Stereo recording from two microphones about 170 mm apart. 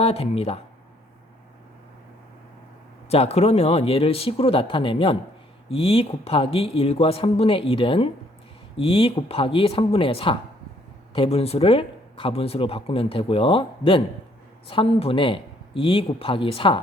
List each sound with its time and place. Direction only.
0.0 s speech: 35° left (ahead or behind)
3.1 s speech: 40° left (ahead or behind)